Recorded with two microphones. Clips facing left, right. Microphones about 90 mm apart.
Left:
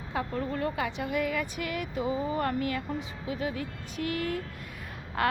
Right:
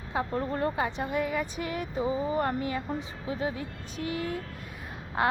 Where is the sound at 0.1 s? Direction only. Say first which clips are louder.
Right 2 dB; 25° right (ahead or behind).